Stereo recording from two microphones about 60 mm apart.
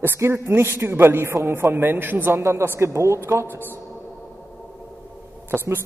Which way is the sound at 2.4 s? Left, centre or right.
Right.